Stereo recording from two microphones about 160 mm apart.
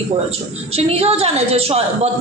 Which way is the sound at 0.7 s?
40° right (ahead or behind).